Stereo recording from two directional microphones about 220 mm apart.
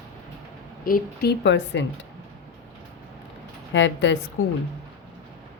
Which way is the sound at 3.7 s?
55° left (ahead or behind).